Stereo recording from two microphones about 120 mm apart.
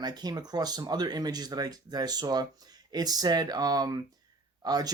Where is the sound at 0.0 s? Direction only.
35° right (ahead or behind).